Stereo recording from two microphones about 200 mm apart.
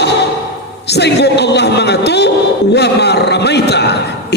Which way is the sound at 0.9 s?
55° left (ahead or behind).